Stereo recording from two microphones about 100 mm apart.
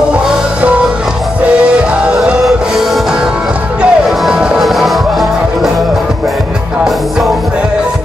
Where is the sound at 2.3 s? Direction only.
Centre (ahead or behind).